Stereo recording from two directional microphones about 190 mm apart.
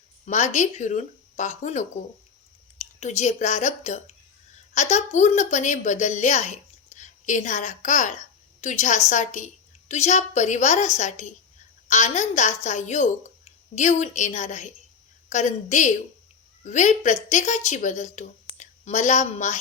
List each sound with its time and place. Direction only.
0.3 s a woman's voice: 40° left (ahead or behind)